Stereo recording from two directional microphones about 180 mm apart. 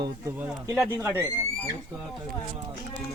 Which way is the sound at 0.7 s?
15° right (ahead or behind).